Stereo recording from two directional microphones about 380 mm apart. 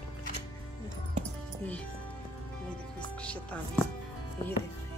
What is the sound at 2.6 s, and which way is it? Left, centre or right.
Music, centre.